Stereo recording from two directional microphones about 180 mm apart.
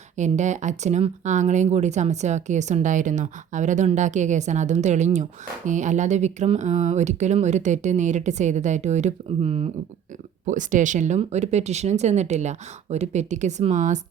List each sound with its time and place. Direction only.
0.2 s speech: 40° right (ahead or behind)
10.4 s speech: 45° right (ahead or behind)